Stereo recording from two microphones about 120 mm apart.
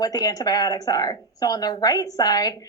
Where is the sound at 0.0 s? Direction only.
30° left (ahead or behind).